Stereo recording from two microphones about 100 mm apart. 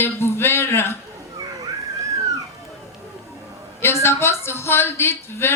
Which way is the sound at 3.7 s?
25° left (ahead or behind).